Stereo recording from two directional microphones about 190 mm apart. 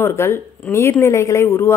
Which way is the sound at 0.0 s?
15° left (ahead or behind).